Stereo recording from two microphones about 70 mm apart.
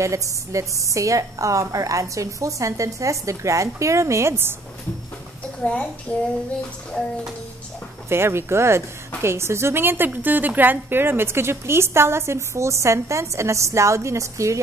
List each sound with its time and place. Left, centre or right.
0.0 s a woman's voice: right
5.6 s a woman's voice: centre
8.1 s a woman's voice: right